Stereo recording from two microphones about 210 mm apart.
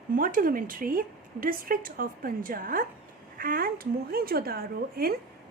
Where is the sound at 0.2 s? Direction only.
40° right (ahead or behind).